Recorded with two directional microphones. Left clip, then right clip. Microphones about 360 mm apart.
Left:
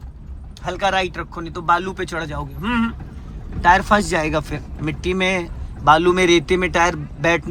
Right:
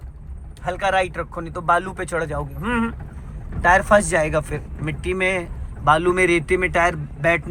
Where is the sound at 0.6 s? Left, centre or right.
Centre.